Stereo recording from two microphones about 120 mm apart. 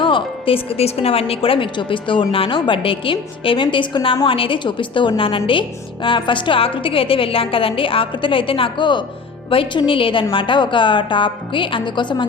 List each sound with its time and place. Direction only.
0.0 s a woman's voice: 45° left (ahead or behind)